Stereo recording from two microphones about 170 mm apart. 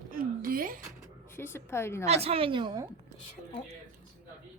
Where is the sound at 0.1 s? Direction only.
55° right (ahead or behind).